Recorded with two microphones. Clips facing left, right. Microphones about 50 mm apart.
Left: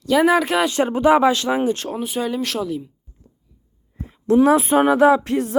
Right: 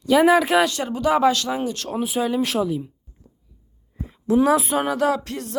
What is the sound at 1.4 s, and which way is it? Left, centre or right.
Music, left.